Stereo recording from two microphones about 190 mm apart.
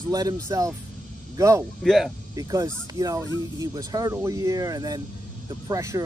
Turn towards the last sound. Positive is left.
turn(degrees=-15)  # may be behind; listen again after turning